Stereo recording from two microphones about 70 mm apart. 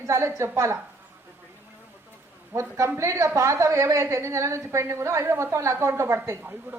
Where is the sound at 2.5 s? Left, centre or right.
Right.